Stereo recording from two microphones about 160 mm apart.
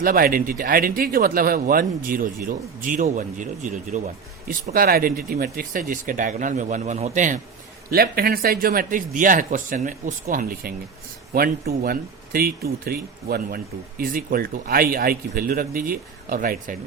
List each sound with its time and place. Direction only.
0.0 s speech: 65° right (ahead or behind); by 7.3 s 50° right (ahead or behind)
7.9 s speech: 75° right (ahead or behind)